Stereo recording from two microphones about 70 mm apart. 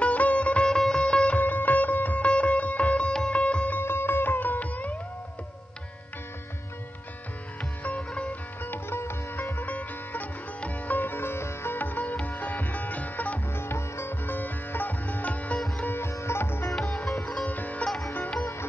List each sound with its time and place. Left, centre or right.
0.0 s music: centre
3.8 s music: left
8.1 s music: centre
8.6 s sitar: left
9.6 s sitar: left
13.5 s sitar: left
15.8 s sitar: left
16.7 s sitar: centre
17.5 s sitar: left